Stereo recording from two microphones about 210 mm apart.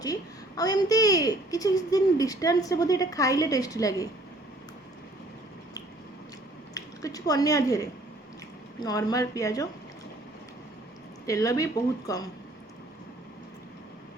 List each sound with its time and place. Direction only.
0.0 s a woman's voice: 15° left (ahead or behind)
6.7 s a woman's voice: 15° left (ahead or behind)
11.3 s a woman's voice: 15° left (ahead or behind)